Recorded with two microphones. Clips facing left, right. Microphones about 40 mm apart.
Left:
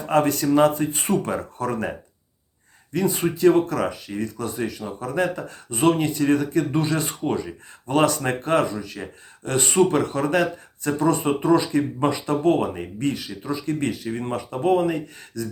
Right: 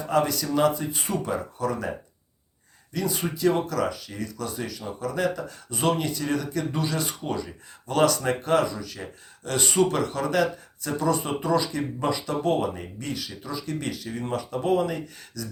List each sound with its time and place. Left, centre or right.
0.1 s speech: left
2.9 s speech: left